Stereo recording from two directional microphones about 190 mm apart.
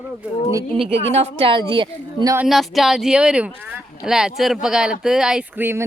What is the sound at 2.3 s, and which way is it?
Speech, centre (ahead or behind).